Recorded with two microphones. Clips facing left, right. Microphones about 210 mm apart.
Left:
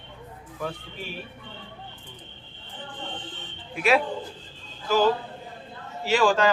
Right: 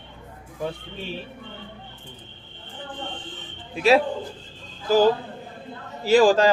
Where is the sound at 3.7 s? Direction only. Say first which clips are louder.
Right 4 dB; 30° right (ahead or behind).